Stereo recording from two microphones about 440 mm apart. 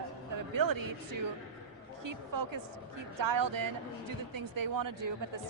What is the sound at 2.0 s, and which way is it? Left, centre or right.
A woman's voice, right.